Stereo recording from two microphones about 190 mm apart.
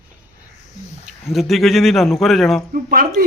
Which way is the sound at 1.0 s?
Centre (ahead or behind).